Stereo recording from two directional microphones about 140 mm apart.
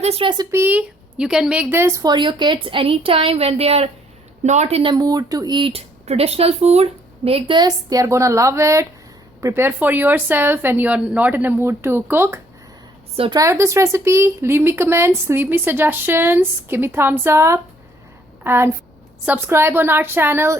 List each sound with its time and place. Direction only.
0.0 s speech: 40° right (ahead or behind)
0.5 s speech: 15° right (ahead or behind)
2.1 s speech: 35° right (ahead or behind); by 12.4 s 15° right (ahead or behind)
13.1 s speech: 40° right (ahead or behind)
13.4 s speech: 20° right (ahead or behind)